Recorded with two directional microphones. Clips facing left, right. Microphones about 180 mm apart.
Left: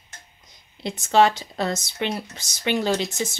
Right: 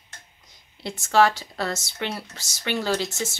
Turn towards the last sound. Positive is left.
turn(degrees=15)  # may be behind; listen again after turning